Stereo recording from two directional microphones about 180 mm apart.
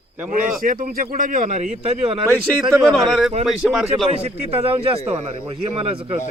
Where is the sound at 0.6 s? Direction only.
50° right (ahead or behind); by 2.2 s 35° right (ahead or behind).